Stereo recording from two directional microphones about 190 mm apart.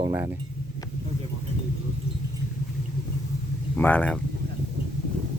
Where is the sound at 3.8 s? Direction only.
10° left (ahead or behind).